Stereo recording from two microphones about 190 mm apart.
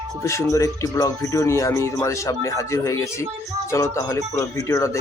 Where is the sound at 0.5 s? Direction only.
15° left (ahead or behind).